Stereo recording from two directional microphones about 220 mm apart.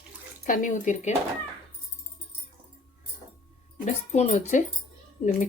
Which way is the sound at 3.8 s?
30° left (ahead or behind).